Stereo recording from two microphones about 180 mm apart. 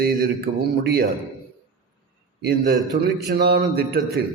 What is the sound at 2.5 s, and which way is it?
A man's voice, 65° right (ahead or behind).